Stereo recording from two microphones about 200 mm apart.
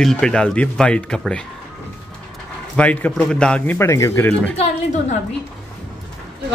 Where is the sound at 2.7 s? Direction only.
5° left (ahead or behind).